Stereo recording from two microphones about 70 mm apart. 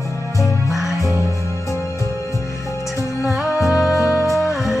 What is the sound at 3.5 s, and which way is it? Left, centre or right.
Music, left.